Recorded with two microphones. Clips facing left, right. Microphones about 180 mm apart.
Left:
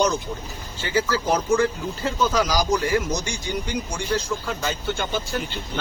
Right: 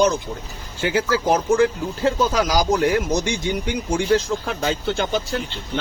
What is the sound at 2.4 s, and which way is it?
Speech, 60° right (ahead or behind).